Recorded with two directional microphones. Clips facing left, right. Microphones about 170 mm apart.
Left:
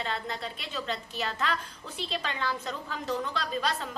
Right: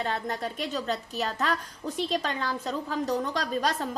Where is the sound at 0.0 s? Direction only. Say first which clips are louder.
Right 4 dB; 45° right (ahead or behind).